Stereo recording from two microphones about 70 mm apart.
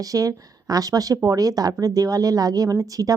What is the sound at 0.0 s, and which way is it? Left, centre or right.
A woman's voice, right.